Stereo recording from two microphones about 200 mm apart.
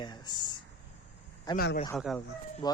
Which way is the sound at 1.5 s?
50° left (ahead or behind).